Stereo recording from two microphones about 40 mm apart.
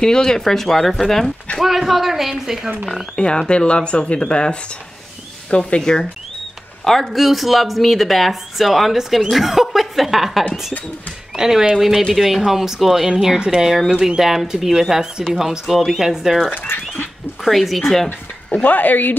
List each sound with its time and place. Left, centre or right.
0.0 s speech: centre
3.2 s speech: left
5.8 s speech: centre
6.8 s speech: centre
16.4 s speech: left
17.5 s speech: centre
18.6 s speech: left